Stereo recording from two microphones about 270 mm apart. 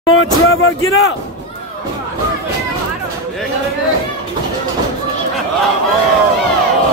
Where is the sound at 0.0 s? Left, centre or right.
Left.